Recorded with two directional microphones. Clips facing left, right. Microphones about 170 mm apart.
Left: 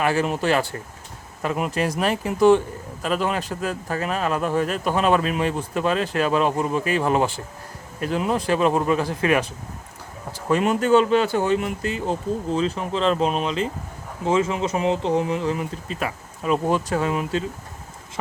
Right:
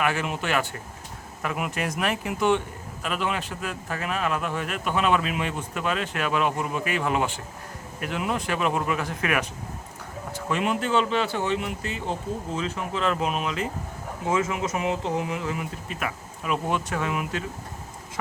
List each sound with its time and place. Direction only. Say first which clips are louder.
0.0 s a man's voice: left 5 dB; 35° left (ahead or behind)
10.3 s a man's voice: left 5 dB; 40° left (ahead or behind)